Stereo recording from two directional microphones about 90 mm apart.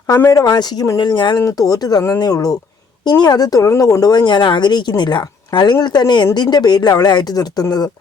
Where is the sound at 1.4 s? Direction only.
40° left (ahead or behind).